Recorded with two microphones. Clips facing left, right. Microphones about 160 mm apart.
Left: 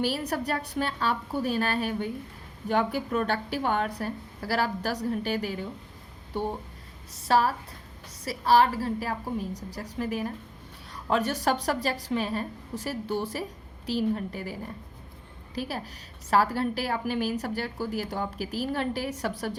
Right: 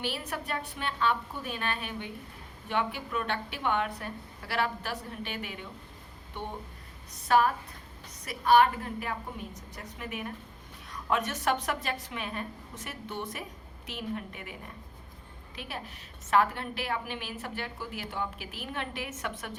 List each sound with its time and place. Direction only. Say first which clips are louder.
0.0 s a woman's voice: left 7 dB; 40° left (ahead or behind)
7.3 s a woman's voice: left 1 dB; 30° left (ahead or behind)
15.5 s a woman's voice: left 7 dB; 35° left (ahead or behind)